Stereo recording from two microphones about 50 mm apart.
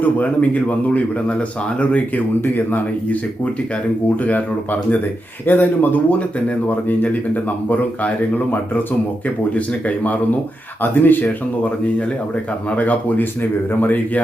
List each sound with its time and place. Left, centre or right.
0.0 s speech: left
2.4 s speech: left
9.6 s speech: left
12.7 s speech: left